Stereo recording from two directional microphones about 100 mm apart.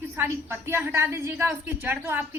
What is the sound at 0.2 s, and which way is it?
A woman's voice, 20° right (ahead or behind).